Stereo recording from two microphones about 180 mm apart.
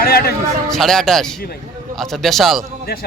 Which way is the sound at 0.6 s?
Centre (ahead or behind).